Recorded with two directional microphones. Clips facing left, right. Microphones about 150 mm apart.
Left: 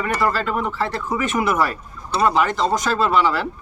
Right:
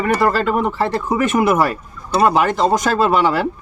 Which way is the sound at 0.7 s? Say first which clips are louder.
Right 5 dB; 20° right (ahead or behind).